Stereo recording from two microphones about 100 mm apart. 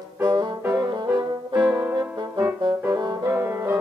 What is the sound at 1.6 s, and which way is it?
Music, 25° right (ahead or behind).